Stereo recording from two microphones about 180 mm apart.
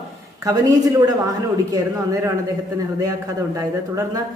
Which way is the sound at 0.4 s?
20° right (ahead or behind).